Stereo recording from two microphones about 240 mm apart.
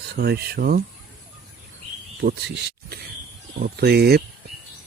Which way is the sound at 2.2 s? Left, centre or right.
Right.